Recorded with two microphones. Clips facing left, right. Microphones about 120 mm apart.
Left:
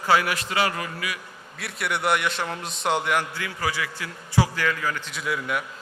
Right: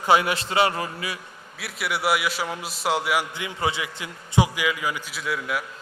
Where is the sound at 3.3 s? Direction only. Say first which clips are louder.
Right 2 dB; 20° right (ahead or behind); by 5.6 s centre (ahead or behind).